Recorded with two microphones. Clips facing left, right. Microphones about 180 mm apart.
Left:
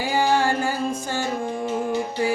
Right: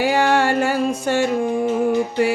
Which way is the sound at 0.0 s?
70° right (ahead or behind).